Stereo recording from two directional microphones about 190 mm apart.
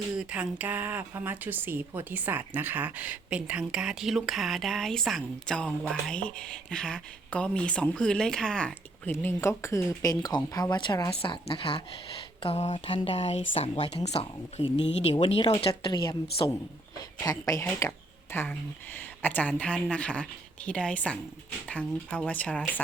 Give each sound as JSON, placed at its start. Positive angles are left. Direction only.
{"t": 0.2, "sound": "speech", "side_deg": -5}
{"t": 12.4, "sound": "a sound", "side_deg": 30}
{"t": 14.6, "sound": "speech", "side_deg": 25}
{"t": 15.0, "sound": "a sound", "side_deg": 30}
{"t": 15.6, "sound": "speech", "side_deg": 25}
{"t": 17.2, "sound": "speech", "side_deg": 20}